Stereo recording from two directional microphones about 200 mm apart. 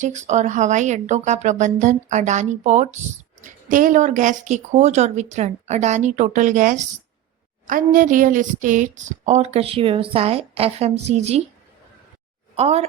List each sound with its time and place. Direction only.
0.0 s a woman's voice: 35° right (ahead or behind)
12.5 s speech: 30° right (ahead or behind)